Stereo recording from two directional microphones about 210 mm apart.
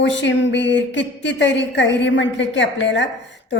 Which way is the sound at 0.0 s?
60° left (ahead or behind).